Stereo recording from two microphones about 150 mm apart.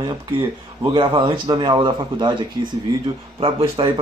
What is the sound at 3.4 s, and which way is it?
Speech, 40° right (ahead or behind).